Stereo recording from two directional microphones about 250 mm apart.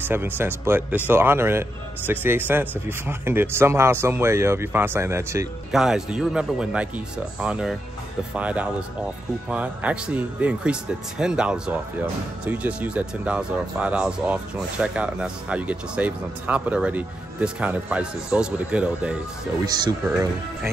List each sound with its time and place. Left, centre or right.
0.0 s speech: centre